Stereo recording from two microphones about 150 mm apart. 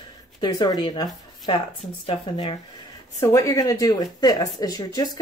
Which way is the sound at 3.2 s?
20° left (ahead or behind).